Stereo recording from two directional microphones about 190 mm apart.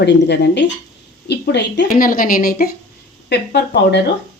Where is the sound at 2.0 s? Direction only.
45° left (ahead or behind).